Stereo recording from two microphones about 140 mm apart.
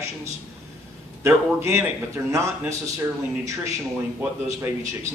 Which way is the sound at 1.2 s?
20° right (ahead or behind).